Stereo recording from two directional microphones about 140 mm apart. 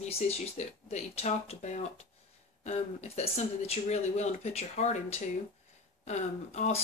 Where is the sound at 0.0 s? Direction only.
50° left (ahead or behind).